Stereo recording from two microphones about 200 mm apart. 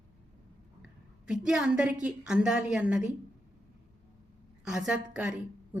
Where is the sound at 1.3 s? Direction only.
5° right (ahead or behind).